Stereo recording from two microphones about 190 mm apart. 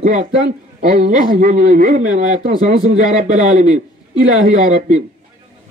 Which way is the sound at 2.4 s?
30° right (ahead or behind).